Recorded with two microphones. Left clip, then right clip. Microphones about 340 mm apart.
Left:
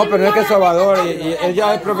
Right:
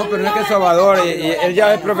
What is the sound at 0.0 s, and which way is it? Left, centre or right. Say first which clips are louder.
Speech: left 4 dB; centre.